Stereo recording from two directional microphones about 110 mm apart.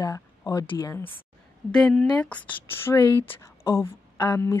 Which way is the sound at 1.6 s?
5° left (ahead or behind).